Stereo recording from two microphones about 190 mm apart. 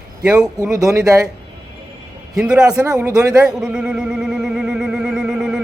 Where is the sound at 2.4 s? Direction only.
5° right (ahead or behind).